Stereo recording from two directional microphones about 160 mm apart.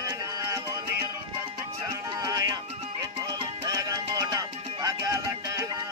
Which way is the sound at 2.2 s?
20° right (ahead or behind).